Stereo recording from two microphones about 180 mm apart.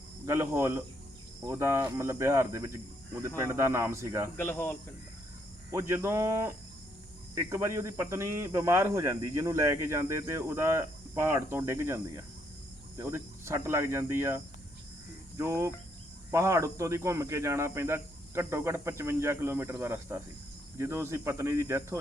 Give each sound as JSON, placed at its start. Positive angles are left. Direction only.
{"t": 0.3, "sound": "speech", "side_deg": -15}
{"t": 4.4, "sound": "speech", "side_deg": 15}
{"t": 5.7, "sound": "speech", "side_deg": -15}